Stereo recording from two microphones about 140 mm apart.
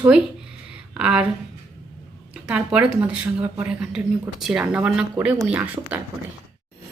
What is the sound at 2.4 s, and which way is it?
A woman's voice, 5° right (ahead or behind).